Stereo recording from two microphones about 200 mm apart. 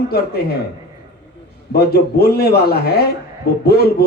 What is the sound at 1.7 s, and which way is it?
A man's voice, 55° left (ahead or behind).